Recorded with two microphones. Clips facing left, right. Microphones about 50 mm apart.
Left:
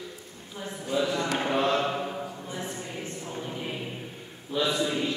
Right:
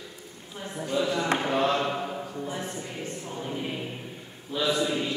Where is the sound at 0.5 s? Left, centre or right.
Right.